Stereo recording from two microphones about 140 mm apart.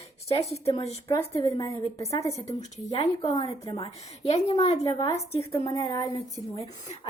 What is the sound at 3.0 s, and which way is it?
Speech, 35° left (ahead or behind).